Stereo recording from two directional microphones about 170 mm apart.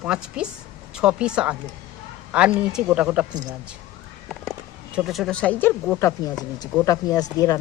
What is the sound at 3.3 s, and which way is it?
Speech, 25° right (ahead or behind).